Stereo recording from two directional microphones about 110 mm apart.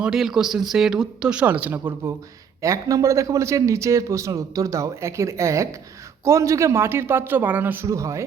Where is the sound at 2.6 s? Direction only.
30° right (ahead or behind).